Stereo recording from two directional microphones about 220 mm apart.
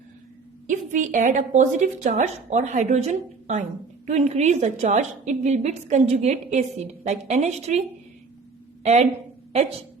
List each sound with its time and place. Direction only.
0.7 s a woman's voice: 35° right (ahead or behind)